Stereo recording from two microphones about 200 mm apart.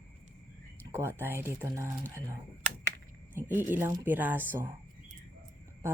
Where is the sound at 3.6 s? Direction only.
10° right (ahead or behind).